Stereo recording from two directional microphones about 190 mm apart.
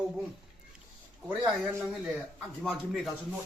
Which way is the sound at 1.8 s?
5° right (ahead or behind).